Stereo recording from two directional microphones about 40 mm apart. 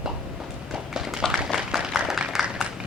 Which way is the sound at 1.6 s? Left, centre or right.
Centre.